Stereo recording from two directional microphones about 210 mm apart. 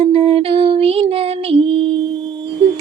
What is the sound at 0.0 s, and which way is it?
Music, 25° right (ahead or behind).